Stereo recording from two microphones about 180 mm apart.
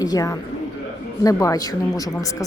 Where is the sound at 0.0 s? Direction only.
20° left (ahead or behind).